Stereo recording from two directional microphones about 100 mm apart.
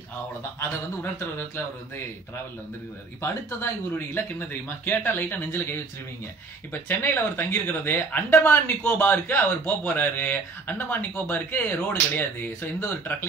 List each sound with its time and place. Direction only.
3.2 s speech: 25° left (ahead or behind)